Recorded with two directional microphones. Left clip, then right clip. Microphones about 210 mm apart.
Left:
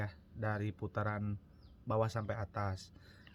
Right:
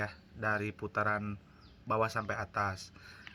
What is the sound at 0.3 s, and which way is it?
Speech, 50° left (ahead or behind).